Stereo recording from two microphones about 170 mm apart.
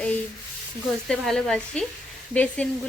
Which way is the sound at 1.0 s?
5° left (ahead or behind).